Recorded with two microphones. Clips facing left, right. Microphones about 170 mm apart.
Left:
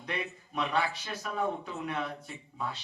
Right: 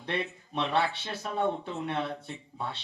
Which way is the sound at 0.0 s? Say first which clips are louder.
Right 4 dB; 30° right (ahead or behind).